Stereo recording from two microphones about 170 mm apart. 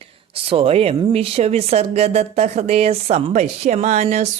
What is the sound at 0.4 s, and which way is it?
Speech, 35° right (ahead or behind).